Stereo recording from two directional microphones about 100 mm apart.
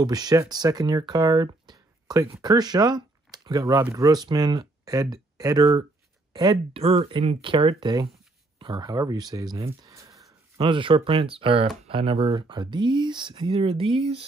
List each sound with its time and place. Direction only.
0.0 s speech: 40° right (ahead or behind)
6.3 s speech: 50° right (ahead or behind)
6.8 s speech: 70° right (ahead or behind)
7.8 s speech: 45° right (ahead or behind)
9.8 s a sound: 30° right (ahead or behind)
10.6 s speech: 60° right (ahead or behind)
12.3 s speech: 50° right (ahead or behind)